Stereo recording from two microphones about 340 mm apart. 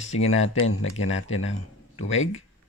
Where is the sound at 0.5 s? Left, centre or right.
Left.